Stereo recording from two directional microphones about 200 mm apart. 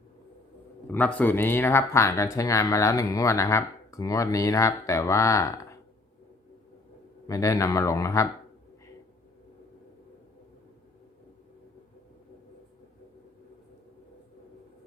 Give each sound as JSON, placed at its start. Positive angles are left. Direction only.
{"t": 0.9, "sound": "speech", "side_deg": 10}
{"t": 7.3, "sound": "speech", "side_deg": 15}